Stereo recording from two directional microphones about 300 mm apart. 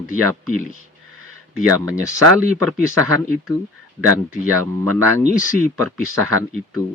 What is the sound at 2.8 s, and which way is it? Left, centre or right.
Speech, right.